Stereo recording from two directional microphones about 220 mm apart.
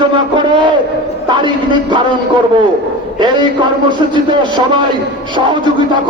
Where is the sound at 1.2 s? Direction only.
20° right (ahead or behind).